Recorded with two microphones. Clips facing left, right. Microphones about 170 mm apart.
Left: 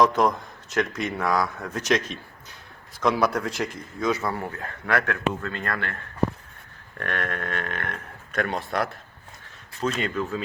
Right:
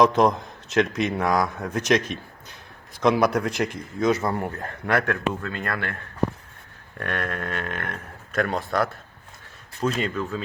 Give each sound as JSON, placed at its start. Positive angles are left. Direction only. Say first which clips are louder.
{"t": 0.0, "sound": "a man's voice", "louder": "right 2 dB", "side_deg": -20}
{"t": 7.2, "sound": "speech", "louder": "even", "side_deg": -5}